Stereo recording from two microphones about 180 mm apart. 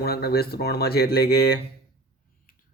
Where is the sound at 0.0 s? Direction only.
60° left (ahead or behind).